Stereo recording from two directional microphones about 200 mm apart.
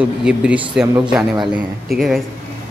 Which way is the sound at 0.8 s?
15° right (ahead or behind).